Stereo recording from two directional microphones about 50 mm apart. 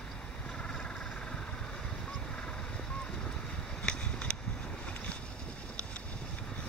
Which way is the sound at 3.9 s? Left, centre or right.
Centre.